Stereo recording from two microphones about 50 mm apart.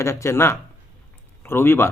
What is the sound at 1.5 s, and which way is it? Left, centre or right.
Speech, left.